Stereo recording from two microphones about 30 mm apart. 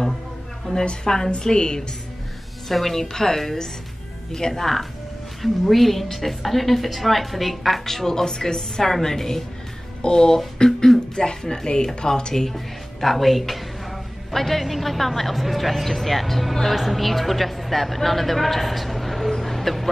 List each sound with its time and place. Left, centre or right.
0.7 s speech: left
2.7 s a woman's voice: centre; by 12.4 s left
12.4 s a sound: centre
14.6 s a woman's voice: centre